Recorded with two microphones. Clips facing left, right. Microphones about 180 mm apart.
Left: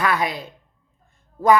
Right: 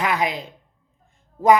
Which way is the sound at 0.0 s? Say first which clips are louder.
Even; 20° right (ahead or behind).